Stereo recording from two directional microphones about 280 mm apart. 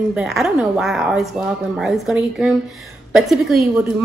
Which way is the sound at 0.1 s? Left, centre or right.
Centre.